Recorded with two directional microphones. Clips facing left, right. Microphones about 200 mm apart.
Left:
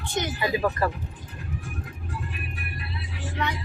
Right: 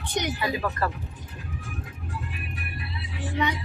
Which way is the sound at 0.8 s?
15° left (ahead or behind).